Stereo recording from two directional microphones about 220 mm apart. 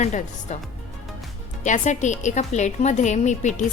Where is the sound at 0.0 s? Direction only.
35° left (ahead or behind).